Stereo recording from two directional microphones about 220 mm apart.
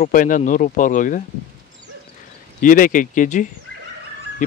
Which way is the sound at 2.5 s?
40° left (ahead or behind).